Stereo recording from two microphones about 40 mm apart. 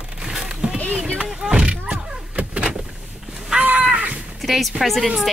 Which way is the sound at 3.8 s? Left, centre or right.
Right.